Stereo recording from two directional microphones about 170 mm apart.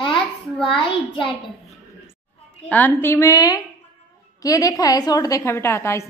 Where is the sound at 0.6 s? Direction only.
30° left (ahead or behind).